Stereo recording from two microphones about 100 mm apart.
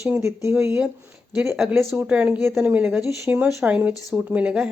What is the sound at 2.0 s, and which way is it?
Speech, 10° right (ahead or behind).